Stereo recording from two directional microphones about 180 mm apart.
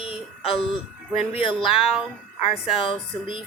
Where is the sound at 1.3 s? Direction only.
30° left (ahead or behind).